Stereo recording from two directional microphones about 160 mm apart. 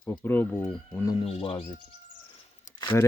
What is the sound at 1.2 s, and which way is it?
Speech, 35° left (ahead or behind).